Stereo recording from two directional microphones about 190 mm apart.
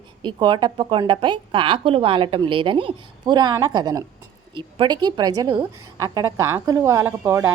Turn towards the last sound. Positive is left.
turn(degrees=-10)  # may be behind; listen again after turning